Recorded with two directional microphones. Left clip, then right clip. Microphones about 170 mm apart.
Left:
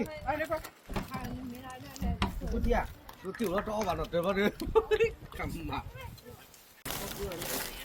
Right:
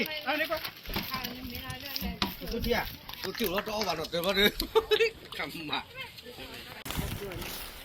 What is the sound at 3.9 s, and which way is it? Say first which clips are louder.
Speech: even; 15° right (ahead or behind).